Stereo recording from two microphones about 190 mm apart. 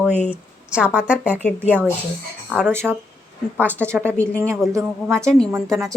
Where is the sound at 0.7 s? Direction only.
5° right (ahead or behind).